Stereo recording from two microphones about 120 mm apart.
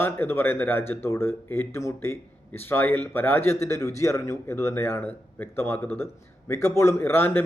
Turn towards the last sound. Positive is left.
turn(degrees=15)  # may be behind; listen again after turning